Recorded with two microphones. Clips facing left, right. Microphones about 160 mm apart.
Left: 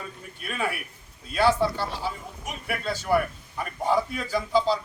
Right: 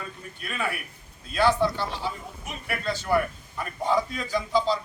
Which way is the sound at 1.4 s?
10° left (ahead or behind).